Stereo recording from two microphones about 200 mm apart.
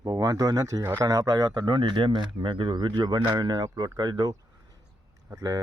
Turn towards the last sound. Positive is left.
turn(degrees=-20)  # may be behind; listen again after turning